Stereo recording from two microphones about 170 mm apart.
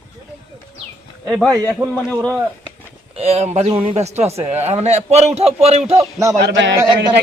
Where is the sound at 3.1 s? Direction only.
35° right (ahead or behind).